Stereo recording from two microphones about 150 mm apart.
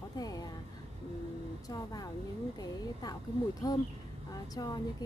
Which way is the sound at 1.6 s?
25° left (ahead or behind).